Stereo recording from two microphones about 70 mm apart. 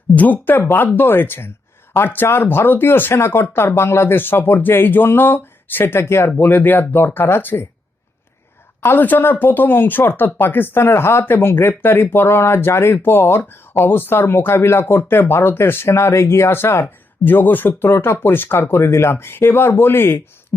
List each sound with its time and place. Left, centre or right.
0.2 s speech: left
6.3 s speech: left
8.8 s speech: left
20.5 s a sound: left